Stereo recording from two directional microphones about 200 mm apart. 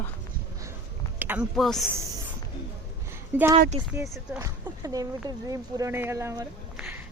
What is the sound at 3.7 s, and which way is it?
Speech, 30° right (ahead or behind).